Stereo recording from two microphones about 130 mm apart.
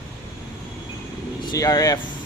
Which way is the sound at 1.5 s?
30° left (ahead or behind).